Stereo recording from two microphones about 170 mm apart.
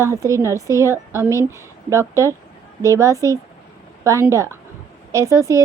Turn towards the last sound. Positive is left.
turn(degrees=-15)  # may be behind; listen again after turning